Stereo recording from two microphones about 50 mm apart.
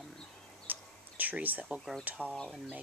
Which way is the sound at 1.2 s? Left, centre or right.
Right.